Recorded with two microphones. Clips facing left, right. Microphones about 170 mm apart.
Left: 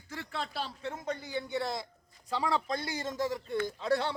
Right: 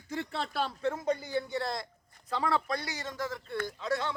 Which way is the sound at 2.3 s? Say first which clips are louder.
Right 1 dB; 15° left (ahead or behind).